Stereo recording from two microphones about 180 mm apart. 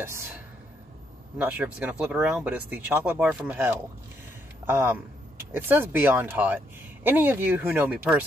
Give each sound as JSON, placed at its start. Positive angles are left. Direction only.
{"t": 0.0, "sound": "speech", "side_deg": -15}
{"t": 1.4, "sound": "speech", "side_deg": -5}